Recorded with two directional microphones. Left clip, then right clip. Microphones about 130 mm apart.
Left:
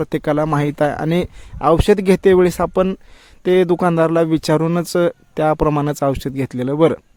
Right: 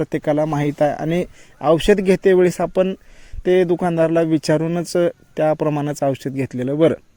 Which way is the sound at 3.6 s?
40° left (ahead or behind).